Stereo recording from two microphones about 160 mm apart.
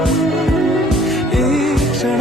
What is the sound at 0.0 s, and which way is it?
Music, centre (ahead or behind).